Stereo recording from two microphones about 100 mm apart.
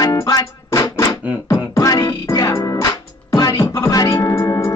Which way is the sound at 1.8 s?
35° left (ahead or behind).